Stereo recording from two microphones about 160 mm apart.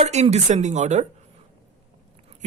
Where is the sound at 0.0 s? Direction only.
45° right (ahead or behind).